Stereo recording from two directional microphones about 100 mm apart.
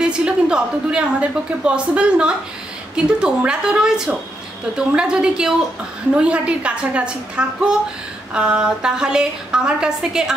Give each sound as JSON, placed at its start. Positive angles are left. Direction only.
{"t": 0.0, "sound": "a woman's voice", "side_deg": -10}